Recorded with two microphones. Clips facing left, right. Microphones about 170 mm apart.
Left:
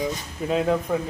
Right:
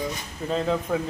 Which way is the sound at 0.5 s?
10° left (ahead or behind).